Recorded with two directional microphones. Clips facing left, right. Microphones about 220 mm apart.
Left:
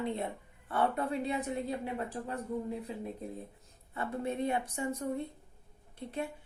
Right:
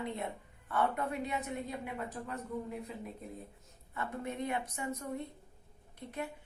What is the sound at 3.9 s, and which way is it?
A woman's voice, 30° left (ahead or behind).